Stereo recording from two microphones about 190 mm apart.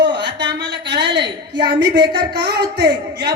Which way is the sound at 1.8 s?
60° right (ahead or behind).